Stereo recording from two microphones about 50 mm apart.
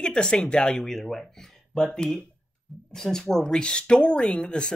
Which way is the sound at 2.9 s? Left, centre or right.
Centre.